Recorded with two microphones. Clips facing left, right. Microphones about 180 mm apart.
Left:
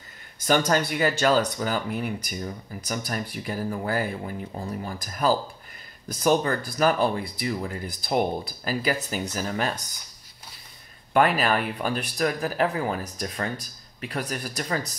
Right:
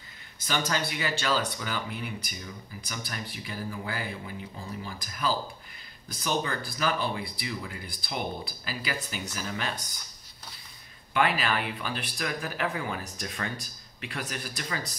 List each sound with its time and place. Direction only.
0.5 s speech: 50° left (ahead or behind)
11.1 s speech: 45° left (ahead or behind)